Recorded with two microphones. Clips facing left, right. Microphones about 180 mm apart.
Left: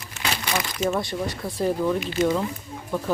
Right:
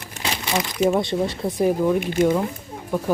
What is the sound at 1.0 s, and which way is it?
Speech, 25° right (ahead or behind).